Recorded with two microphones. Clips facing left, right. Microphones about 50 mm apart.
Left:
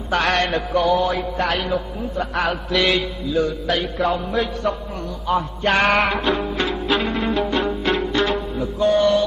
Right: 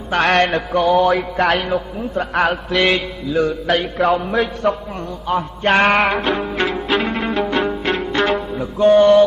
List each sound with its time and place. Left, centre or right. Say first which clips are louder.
0.1 s music: right 4 dB; right
1.0 s music: right 5 dB; right
1.4 s a man's voice: right 3 dB; right
2.7 s music: right 1 dB; right
3.3 s a man's voice: right 4 dB; right
5.6 s music: right 4 dB; right
8.1 s music: right 3 dB; right
8.8 s music: right 6 dB; right